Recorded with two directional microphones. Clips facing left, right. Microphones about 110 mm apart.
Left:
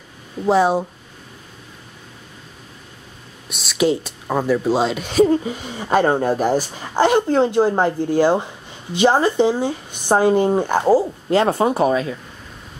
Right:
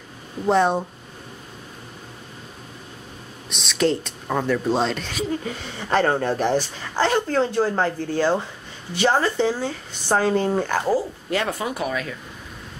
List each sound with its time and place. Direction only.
0.5 s speech: 5° left (ahead or behind)
3.4 s speech: 5° left (ahead or behind)
5.1 s speech: 40° left (ahead or behind)
5.4 s speech: 15° left (ahead or behind); by 12.2 s 30° left (ahead or behind)